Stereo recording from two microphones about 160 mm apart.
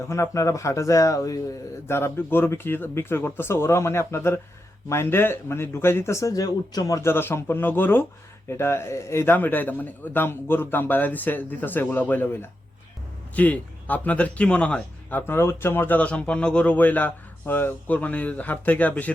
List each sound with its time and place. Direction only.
0.1 s speech: 20° left (ahead or behind)